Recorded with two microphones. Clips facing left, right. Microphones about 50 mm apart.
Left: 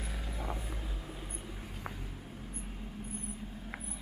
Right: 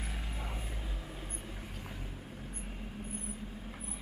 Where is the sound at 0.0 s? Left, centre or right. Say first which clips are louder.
Left 1 dB; centre.